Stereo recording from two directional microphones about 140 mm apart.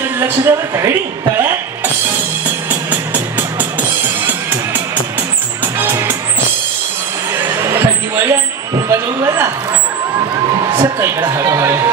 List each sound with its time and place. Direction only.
0.5 s speech: 20° right (ahead or behind)
2.7 s music: 15° right (ahead or behind)
7.3 s a sound: 15° right (ahead or behind)
10.8 s speech: 15° right (ahead or behind)